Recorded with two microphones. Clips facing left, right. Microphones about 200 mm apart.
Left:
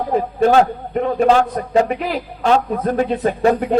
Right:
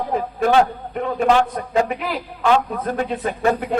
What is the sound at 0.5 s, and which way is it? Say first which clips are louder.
A man's voice: left 3 dB; 40° left (ahead or behind).